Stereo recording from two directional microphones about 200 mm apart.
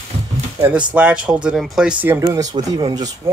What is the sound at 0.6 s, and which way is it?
Speech, 10° right (ahead or behind).